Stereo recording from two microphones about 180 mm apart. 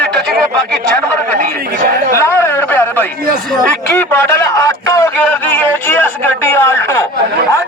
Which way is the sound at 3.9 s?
10° left (ahead or behind).